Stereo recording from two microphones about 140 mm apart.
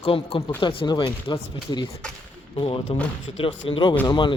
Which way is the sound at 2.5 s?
40° left (ahead or behind).